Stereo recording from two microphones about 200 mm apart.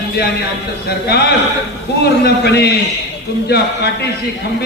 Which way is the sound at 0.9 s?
55° left (ahead or behind).